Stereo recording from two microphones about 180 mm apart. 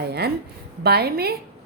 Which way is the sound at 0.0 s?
65° right (ahead or behind).